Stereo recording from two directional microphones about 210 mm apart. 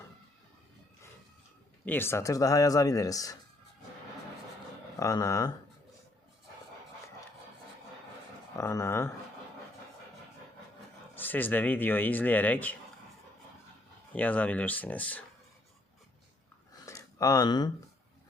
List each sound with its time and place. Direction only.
1.8 s speech: 10° left (ahead or behind)
4.9 s speech: 15° left (ahead or behind)
8.5 s speech: 15° left (ahead or behind)
11.1 s speech: 10° left (ahead or behind)
14.1 s speech: 5° left (ahead or behind)
16.8 s a sound: 15° left (ahead or behind)